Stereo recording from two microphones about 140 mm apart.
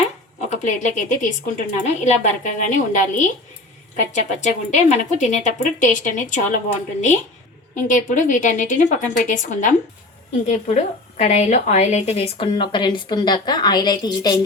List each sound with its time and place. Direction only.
0.5 s a woman's voice: 60° left (ahead or behind)
7.8 s a woman's voice: 70° left (ahead or behind); by 14.3 s 30° left (ahead or behind)